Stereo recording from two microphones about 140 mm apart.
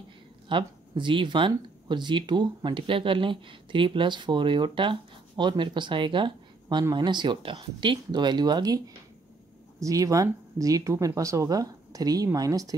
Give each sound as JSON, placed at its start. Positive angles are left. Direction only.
{"t": 0.5, "sound": "speech", "side_deg": -35}